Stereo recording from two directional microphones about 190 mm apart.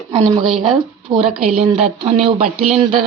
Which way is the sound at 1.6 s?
35° right (ahead or behind).